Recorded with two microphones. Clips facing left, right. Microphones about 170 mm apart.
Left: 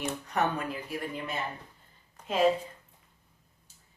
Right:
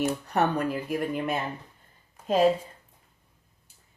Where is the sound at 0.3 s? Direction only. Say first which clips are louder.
Right 1 dB; 40° right (ahead or behind); by 1.4 s 55° right (ahead or behind).